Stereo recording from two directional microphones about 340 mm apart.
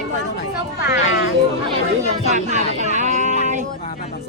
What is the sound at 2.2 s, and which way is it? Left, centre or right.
Speech, centre.